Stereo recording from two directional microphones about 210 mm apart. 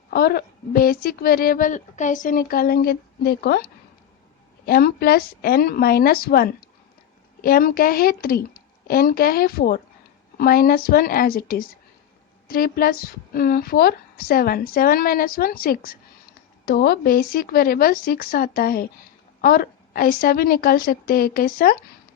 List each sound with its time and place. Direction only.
0.1 s speech: 50° left (ahead or behind)